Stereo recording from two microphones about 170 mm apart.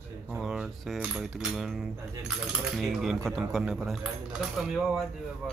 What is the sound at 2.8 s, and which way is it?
Speech, centre (ahead or behind).